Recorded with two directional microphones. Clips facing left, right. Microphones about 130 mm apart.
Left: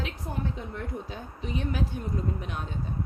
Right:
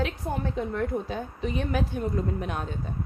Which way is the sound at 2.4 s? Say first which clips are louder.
Right 5 dB; 55° right (ahead or behind).